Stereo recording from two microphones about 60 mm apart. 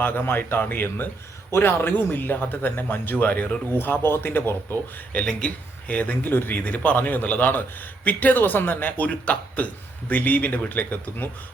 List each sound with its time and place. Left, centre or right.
0.0 s speech: left
5.2 s speech: centre